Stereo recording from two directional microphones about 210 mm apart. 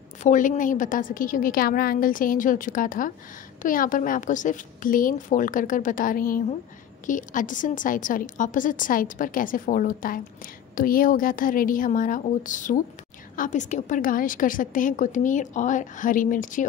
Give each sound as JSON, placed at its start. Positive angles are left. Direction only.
{"t": 0.2, "sound": "a woman's voice", "side_deg": 40}